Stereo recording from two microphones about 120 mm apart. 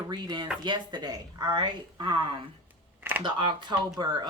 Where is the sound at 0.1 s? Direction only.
40° right (ahead or behind).